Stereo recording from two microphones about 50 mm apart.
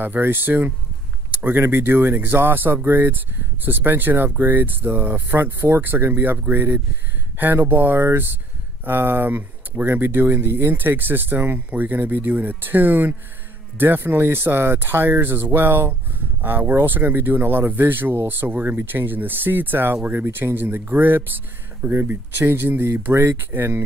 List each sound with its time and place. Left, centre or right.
0.0 s speech: right
10.4 s speech: right
11.0 s speech: right